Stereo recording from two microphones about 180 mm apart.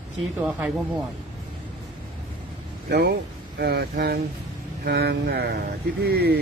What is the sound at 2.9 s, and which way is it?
Speech, 65° right (ahead or behind).